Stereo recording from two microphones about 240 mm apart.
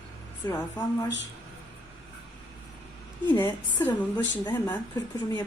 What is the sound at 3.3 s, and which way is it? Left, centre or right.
Speech, centre.